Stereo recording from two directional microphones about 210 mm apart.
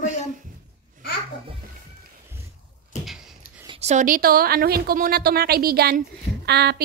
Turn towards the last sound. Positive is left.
turn(degrees=-50)  # may be behind; listen again after turning